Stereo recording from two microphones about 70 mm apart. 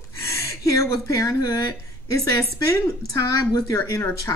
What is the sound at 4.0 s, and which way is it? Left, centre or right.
Speech, left.